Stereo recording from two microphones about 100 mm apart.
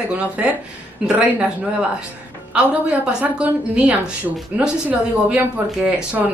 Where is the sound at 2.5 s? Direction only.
10° right (ahead or behind).